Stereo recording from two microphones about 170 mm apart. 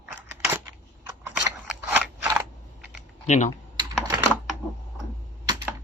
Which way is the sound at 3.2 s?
45° left (ahead or behind).